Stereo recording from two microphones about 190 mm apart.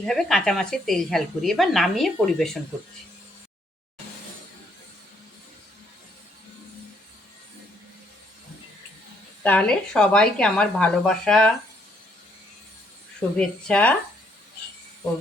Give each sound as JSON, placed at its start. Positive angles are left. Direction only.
{"t": 0.0, "sound": "speech", "side_deg": 0}
{"t": 9.4, "sound": "speech", "side_deg": 5}
{"t": 13.1, "sound": "speech", "side_deg": 5}